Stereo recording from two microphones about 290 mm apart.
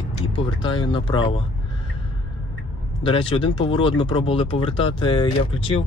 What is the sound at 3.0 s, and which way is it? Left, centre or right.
Speech, centre.